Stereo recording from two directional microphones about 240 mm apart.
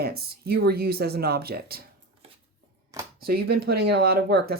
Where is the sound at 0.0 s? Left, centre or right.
Right.